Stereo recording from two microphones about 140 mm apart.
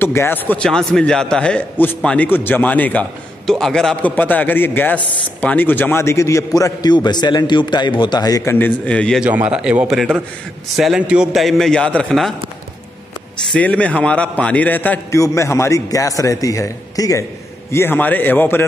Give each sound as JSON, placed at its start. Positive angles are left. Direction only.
{"t": 0.0, "sound": "a man's voice", "side_deg": 15}
{"t": 9.2, "sound": "a man's voice", "side_deg": -10}
{"t": 13.5, "sound": "a man's voice", "side_deg": 10}